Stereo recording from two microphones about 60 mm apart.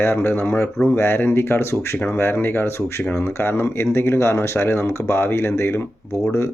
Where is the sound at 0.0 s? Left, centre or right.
Left.